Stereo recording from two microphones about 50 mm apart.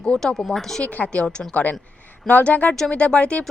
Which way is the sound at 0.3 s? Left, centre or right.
Centre.